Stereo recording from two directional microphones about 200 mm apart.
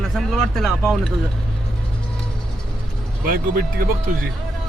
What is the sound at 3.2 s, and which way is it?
Speech, 45° right (ahead or behind).